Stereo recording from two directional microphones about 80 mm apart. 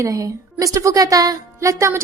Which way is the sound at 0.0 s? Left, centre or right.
Right.